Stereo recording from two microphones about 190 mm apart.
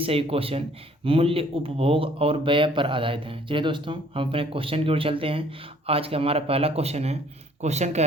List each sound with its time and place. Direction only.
0.0 s speech: 30° right (ahead or behind)